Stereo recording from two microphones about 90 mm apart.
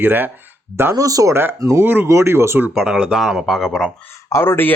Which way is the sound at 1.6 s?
35° right (ahead or behind).